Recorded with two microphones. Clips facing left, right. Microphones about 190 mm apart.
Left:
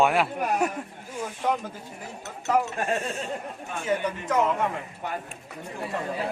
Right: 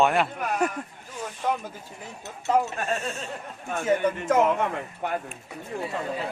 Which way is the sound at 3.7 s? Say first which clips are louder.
Right 4 dB; 50° right (ahead or behind).